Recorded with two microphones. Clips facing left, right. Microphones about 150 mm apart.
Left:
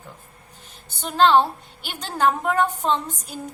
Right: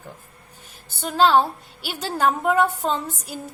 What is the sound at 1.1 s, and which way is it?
A woman's voice, centre (ahead or behind).